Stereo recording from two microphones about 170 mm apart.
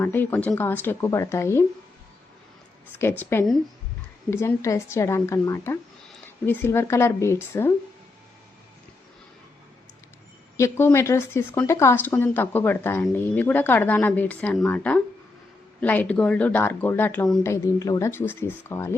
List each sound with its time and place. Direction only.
0.0 s speech: 10° left (ahead or behind)
3.0 s speech: 15° left (ahead or behind)
10.6 s speech: 15° left (ahead or behind)
17.4 s speech: 20° left (ahead or behind)